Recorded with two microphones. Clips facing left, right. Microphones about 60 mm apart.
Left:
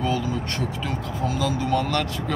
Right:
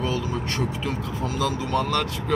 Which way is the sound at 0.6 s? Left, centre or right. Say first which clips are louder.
Right 1 dB; centre.